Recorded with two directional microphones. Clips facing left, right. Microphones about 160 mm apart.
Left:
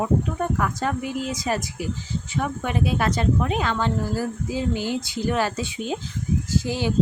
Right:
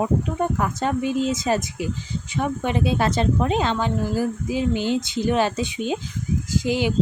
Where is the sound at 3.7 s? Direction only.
15° right (ahead or behind).